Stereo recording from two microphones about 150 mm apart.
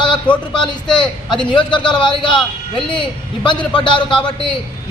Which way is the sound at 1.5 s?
30° left (ahead or behind).